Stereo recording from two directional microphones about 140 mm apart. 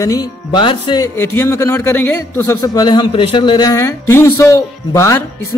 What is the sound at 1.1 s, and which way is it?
A man's voice, 15° left (ahead or behind).